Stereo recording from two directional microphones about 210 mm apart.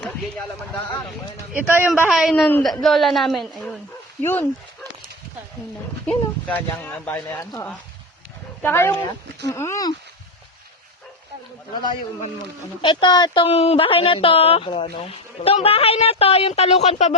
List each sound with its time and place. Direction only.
1.5 s a man's voice: 10° right (ahead or behind); by 4.9 s 10° left (ahead or behind)
6.1 s speech: 5° left (ahead or behind)
11.7 s speech: 20° left (ahead or behind)